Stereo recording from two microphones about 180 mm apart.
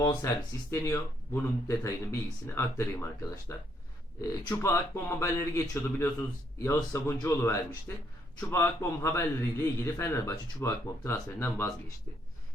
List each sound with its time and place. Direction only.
0.0 s a man's voice: 25° left (ahead or behind)